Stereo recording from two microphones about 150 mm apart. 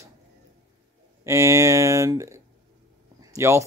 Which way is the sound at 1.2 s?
20° right (ahead or behind).